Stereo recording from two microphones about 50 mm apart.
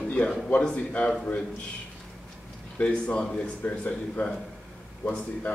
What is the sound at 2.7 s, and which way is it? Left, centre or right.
Speech, left.